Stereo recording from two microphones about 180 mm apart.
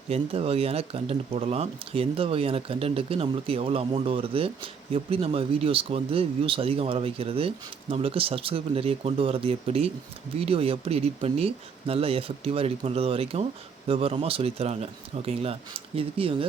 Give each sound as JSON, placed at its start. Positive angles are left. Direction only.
{"t": 0.1, "sound": "speech", "side_deg": -35}